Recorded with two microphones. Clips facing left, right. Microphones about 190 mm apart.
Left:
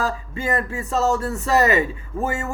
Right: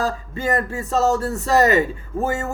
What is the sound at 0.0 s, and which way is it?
Speech, 35° right (ahead or behind).